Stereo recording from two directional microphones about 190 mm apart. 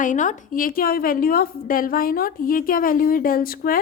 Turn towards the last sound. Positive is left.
turn(degrees=50)  # may be behind; listen again after turning